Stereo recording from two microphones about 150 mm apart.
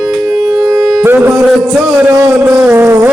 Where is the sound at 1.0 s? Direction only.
15° right (ahead or behind).